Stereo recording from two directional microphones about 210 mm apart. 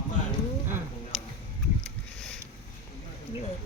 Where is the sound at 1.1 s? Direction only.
5° left (ahead or behind).